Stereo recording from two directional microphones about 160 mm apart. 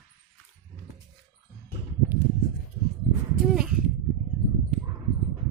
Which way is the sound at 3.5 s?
5° right (ahead or behind).